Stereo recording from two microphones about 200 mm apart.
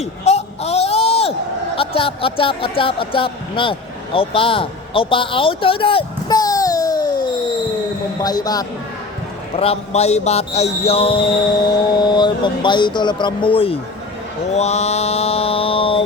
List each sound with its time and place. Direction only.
0.0 s a sound: 30° left (ahead or behind)
1.7 s a man's voice: 25° left (ahead or behind)
8.2 s a man's voice: 20° left (ahead or behind)
9.6 s a man's voice: 30° left (ahead or behind)
14.5 s mantra: 35° left (ahead or behind)